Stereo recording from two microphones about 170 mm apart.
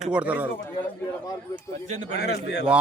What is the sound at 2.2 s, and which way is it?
Speech, 70° left (ahead or behind).